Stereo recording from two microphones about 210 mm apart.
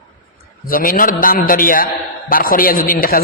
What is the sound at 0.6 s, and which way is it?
A man's voice, 40° left (ahead or behind).